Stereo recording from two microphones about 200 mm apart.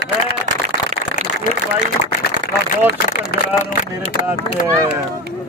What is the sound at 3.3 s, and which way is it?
Speech, 50° left (ahead or behind).